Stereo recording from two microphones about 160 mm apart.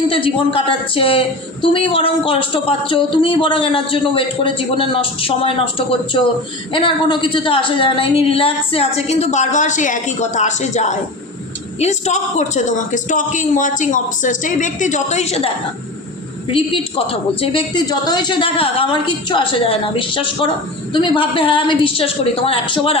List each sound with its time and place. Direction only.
0.1 s speech: 35° left (ahead or behind)
16.5 s speech: 35° left (ahead or behind)